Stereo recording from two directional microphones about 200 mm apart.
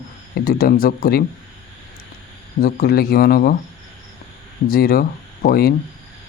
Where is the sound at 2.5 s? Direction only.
50° left (ahead or behind).